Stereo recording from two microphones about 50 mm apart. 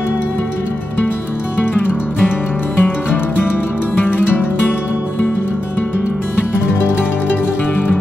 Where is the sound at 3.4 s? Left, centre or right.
Left.